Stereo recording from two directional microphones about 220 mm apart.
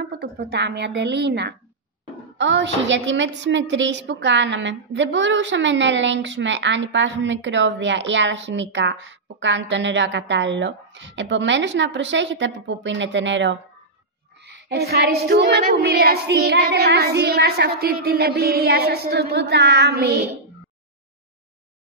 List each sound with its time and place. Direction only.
0.0 s a woman's voice: 50° right (ahead or behind)
14.4 s child singing: 50° right (ahead or behind)